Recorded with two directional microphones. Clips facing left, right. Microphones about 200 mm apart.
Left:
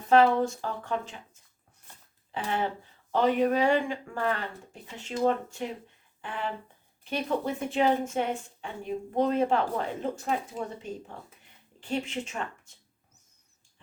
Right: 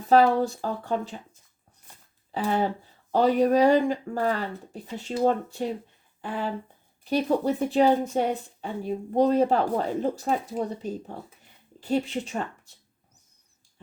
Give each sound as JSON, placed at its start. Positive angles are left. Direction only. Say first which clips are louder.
{"t": 0.1, "sound": "a woman's voice", "louder": "right 2 dB", "side_deg": -35}